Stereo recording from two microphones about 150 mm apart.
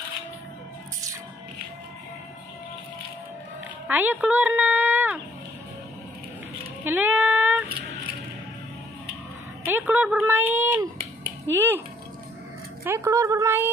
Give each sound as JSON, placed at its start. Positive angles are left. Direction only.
{"t": 3.8, "sound": "speech", "side_deg": -10}
{"t": 6.8, "sound": "a sound", "side_deg": -10}
{"t": 9.7, "sound": "speech", "side_deg": -10}
{"t": 12.8, "sound": "speech", "side_deg": -20}